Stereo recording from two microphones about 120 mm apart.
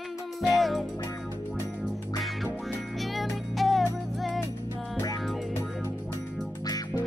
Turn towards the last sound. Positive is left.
turn(degrees=30)  # may be behind; listen again after turning